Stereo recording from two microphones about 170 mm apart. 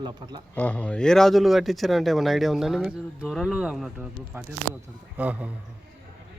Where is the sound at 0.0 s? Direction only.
25° right (ahead or behind).